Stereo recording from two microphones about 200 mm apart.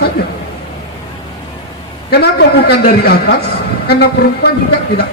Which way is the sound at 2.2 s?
55° left (ahead or behind).